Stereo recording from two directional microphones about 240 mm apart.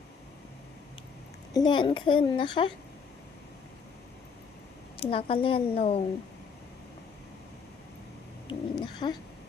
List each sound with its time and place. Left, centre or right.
1.5 s a woman's voice: centre
4.9 s a woman's voice: left
8.4 s bird: centre